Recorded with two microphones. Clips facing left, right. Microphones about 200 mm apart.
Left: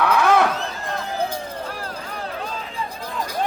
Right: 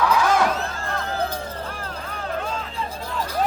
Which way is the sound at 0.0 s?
60° left (ahead or behind).